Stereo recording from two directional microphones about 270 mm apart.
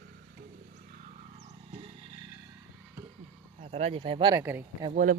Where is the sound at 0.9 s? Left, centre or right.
Right.